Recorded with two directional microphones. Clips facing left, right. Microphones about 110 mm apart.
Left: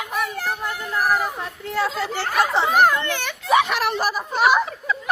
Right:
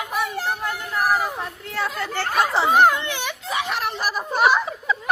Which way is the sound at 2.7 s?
20° right (ahead or behind).